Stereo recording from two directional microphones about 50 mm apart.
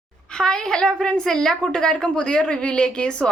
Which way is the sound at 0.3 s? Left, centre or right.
Centre.